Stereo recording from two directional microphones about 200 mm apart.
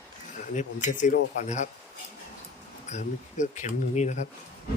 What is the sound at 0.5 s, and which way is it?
Speech, 35° left (ahead or behind).